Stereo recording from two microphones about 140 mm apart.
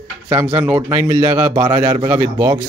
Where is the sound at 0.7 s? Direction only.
20° right (ahead or behind).